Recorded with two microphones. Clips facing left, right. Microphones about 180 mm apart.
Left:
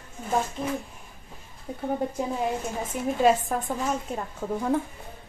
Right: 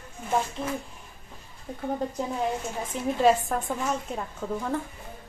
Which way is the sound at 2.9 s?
Centre (ahead or behind).